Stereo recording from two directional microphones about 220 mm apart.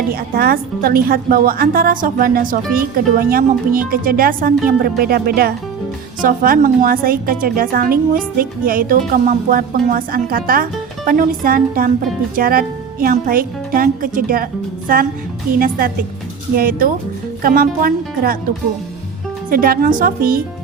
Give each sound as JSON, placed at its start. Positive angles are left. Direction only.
{"t": 0.1, "sound": "a woman's voice", "side_deg": -40}
{"t": 15.5, "sound": "a woman's voice", "side_deg": -40}
{"t": 19.5, "sound": "a woman's voice", "side_deg": -40}